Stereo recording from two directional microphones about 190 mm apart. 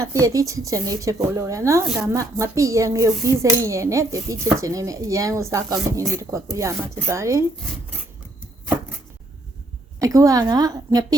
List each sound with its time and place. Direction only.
0.0 s a woman's voice: 15° right (ahead or behind)
10.0 s a woman's voice: 20° right (ahead or behind)